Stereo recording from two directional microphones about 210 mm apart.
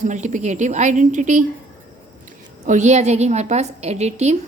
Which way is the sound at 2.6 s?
35° right (ahead or behind).